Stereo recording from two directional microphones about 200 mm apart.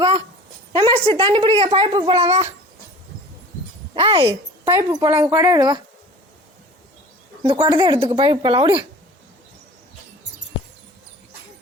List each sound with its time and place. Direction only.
0.7 s speech: 20° right (ahead or behind)
4.0 s speech: 20° right (ahead or behind)
7.4 s speech: 20° right (ahead or behind)